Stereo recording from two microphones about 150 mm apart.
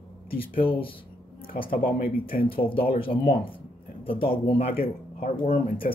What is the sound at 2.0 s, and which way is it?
Speech, 75° left (ahead or behind).